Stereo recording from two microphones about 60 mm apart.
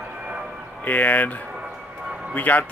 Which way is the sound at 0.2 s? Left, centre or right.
Centre.